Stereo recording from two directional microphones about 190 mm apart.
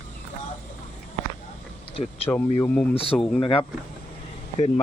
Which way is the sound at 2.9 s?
30° left (ahead or behind).